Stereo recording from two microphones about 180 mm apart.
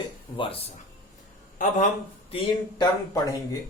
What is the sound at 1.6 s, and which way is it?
Speech, 45° left (ahead or behind).